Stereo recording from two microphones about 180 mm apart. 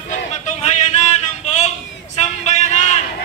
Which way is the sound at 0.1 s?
40° left (ahead or behind).